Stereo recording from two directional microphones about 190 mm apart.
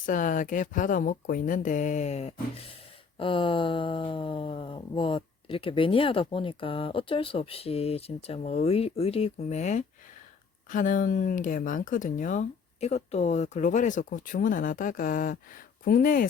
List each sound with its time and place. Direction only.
0.0 s speech: 45° left (ahead or behind)
3.2 s a sound: 25° left (ahead or behind)
10.7 s speech: 45° left (ahead or behind)